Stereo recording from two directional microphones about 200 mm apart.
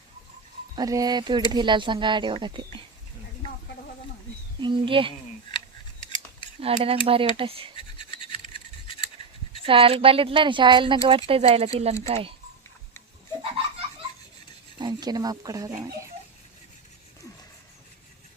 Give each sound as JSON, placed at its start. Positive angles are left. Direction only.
{"t": 0.8, "sound": "speech", "side_deg": -20}
{"t": 4.6, "sound": "speech", "side_deg": -25}
{"t": 5.5, "sound": "scissors", "side_deg": 25}
{"t": 6.6, "sound": "speech", "side_deg": -30}
{"t": 8.3, "sound": "a sound", "side_deg": 25}
{"t": 9.6, "sound": "speech", "side_deg": -25}
{"t": 14.8, "sound": "speech", "side_deg": -20}